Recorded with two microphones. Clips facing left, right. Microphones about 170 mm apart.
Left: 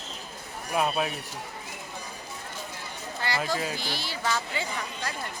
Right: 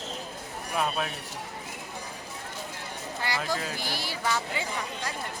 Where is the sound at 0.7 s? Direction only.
10° left (ahead or behind).